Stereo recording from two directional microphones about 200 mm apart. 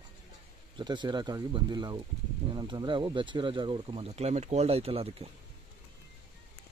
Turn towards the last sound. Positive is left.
turn(degrees=-30)  # may be behind; listen again after turning